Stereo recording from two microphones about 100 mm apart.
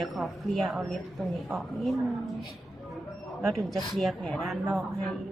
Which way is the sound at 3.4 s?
Centre (ahead or behind).